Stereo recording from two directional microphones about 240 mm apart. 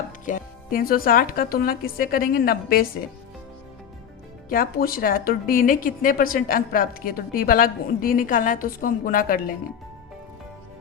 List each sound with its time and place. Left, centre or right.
0.3 s a woman's voice: left
4.4 s a woman's voice: left